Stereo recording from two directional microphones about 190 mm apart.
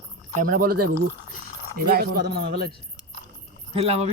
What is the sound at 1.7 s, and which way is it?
Speech, 55° right (ahead or behind).